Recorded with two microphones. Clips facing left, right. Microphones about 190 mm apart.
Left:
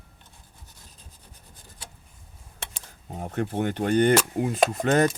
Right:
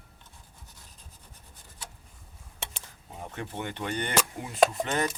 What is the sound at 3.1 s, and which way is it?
Speech, 45° left (ahead or behind).